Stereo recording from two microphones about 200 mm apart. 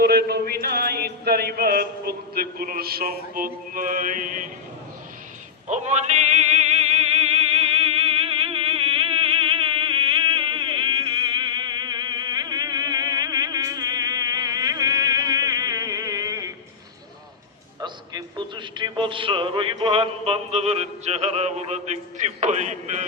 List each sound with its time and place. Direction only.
0.0 s a sound: 50° right (ahead or behind)
5.6 s music: 35° right (ahead or behind); by 16.5 s 15° right (ahead or behind)
17.7 s a man's voice: 20° right (ahead or behind)